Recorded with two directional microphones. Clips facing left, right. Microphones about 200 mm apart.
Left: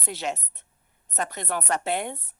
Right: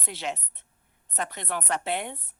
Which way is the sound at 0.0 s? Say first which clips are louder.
Left 3 dB; 40° left (ahead or behind).